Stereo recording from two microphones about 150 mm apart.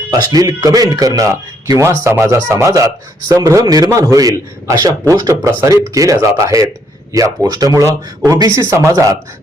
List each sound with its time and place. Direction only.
0.1 s speech: 25° right (ahead or behind)